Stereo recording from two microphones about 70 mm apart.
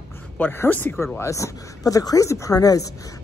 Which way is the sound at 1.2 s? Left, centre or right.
Left.